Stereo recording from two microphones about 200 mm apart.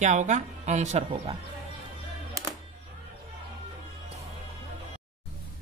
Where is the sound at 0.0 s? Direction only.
35° right (ahead or behind).